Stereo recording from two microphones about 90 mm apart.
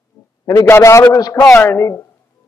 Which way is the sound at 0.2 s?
45° left (ahead or behind).